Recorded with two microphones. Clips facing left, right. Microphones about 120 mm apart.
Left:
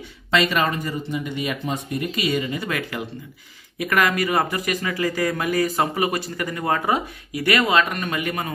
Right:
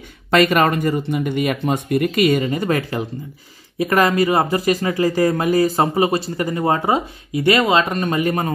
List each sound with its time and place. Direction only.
0.3 s speech: 50° right (ahead or behind)